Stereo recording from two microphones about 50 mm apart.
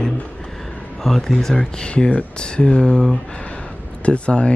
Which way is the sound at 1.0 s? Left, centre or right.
Centre.